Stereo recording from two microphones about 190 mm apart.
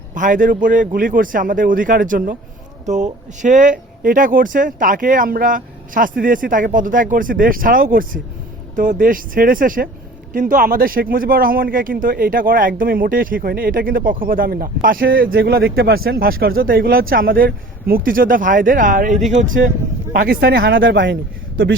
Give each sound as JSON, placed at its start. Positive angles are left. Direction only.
{"t": 0.1, "sound": "speech", "side_deg": -45}
{"t": 20.1, "sound": "speech", "side_deg": -55}